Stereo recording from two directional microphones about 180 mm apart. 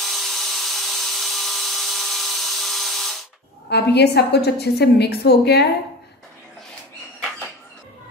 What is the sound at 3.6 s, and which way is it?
A woman's voice, 65° left (ahead or behind).